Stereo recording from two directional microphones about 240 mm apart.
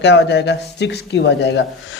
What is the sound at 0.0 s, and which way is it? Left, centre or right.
A man's voice, left.